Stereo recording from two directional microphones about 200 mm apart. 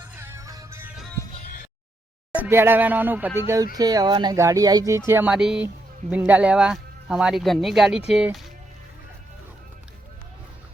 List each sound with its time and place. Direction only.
0.0 s music: 10° right (ahead or behind)
2.3 s speech: 10° right (ahead or behind)